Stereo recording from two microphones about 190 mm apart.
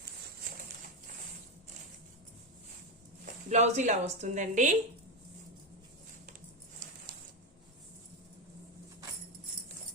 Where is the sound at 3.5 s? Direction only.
35° right (ahead or behind).